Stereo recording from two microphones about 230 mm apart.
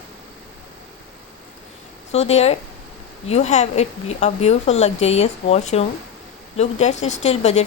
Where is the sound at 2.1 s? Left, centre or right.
Left.